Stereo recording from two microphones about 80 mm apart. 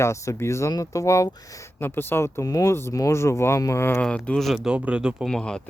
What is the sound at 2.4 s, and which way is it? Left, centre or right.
Speech, left.